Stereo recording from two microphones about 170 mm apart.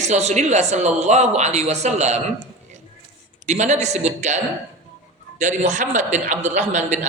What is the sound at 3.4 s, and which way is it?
A man's voice, 45° right (ahead or behind).